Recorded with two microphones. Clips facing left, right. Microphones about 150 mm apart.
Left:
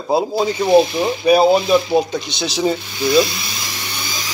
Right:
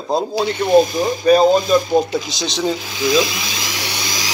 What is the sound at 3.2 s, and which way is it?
Dental drill, 90° right.